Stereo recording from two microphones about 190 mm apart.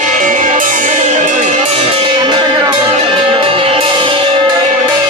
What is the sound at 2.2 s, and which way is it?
Music, 25° right (ahead or behind).